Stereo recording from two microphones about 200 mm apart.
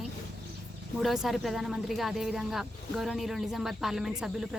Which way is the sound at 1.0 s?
Centre (ahead or behind).